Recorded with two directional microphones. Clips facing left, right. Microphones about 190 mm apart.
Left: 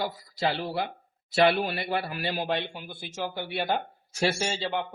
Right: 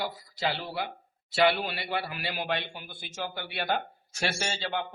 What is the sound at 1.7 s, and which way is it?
Speech, 45° left (ahead or behind).